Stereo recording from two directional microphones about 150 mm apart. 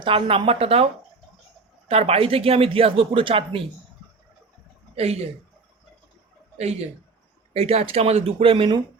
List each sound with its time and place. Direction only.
0.0 s speech: 35° right (ahead or behind)
1.9 s speech: 40° right (ahead or behind)
4.9 s speech: 45° right (ahead or behind)
6.6 s speech: 45° right (ahead or behind)